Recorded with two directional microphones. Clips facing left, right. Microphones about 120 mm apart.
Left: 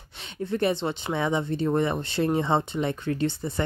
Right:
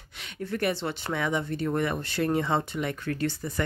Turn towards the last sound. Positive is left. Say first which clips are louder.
# left 3 dB
turn(degrees=25)  # may be behind; listen again after turning